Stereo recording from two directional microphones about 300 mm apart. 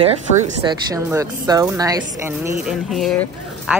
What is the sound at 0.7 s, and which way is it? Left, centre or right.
Speech, centre.